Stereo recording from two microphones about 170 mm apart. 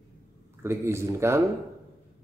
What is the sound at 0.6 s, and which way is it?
Speech, 15° right (ahead or behind).